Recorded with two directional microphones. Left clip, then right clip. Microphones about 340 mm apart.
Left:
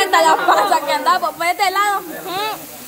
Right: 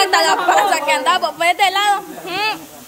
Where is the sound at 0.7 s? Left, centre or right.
Centre.